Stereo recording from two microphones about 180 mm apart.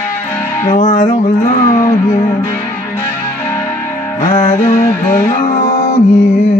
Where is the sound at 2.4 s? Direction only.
15° left (ahead or behind).